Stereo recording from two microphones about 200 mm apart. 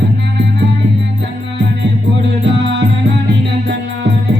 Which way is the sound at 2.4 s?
65° right (ahead or behind).